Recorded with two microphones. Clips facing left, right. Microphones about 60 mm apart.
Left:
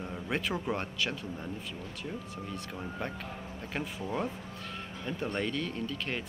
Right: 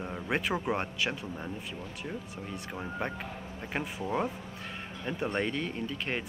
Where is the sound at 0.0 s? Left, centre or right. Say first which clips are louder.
Right 2 dB; centre.